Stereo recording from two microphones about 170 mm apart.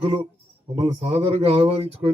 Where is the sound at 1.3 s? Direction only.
35° right (ahead or behind).